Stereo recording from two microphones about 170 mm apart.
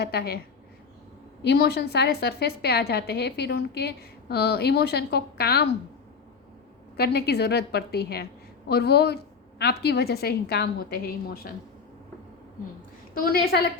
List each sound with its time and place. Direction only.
0.0 s a woman's voice: 70° left (ahead or behind)
1.4 s a woman's voice: 75° left (ahead or behind)
6.9 s a woman's voice: 70° left (ahead or behind)
13.1 s a woman's voice: 60° left (ahead or behind)